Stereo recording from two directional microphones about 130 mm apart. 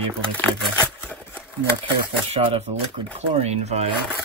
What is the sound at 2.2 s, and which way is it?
Speech, 50° right (ahead or behind).